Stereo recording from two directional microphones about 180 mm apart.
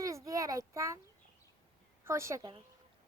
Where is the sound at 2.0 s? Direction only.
15° right (ahead or behind).